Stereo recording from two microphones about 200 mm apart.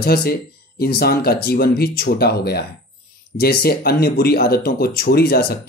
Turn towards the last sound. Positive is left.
turn(degrees=50)  # may be behind; listen again after turning